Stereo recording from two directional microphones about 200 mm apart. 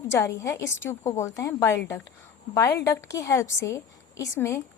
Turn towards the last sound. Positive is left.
turn(degrees=15)  # may be behind; listen again after turning